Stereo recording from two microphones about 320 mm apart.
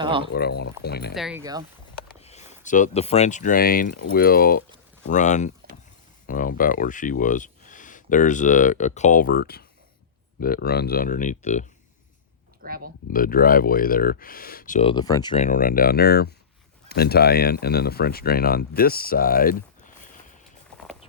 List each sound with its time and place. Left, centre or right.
0.0 s speech: centre
0.3 s speech: left
1.1 s speech: centre
2.2 s a sound: left
2.6 s speech: left
12.6 s speech: right
13.1 s speech: left